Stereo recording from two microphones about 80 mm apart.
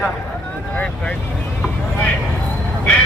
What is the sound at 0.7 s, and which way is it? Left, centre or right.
Speech, centre.